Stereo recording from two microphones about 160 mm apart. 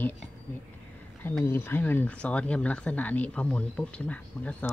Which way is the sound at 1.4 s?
15° left (ahead or behind).